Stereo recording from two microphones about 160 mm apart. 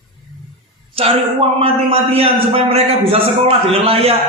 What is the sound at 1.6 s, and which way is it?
Speech, 35° right (ahead or behind).